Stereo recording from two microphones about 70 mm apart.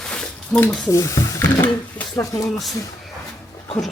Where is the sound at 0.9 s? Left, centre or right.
Left.